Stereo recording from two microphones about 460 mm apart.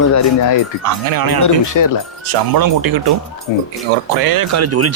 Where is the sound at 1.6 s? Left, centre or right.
Left.